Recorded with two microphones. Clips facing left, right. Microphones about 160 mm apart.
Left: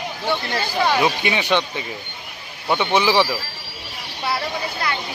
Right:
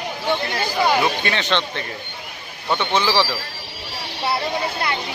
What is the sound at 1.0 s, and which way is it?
Speech, 15° left (ahead or behind).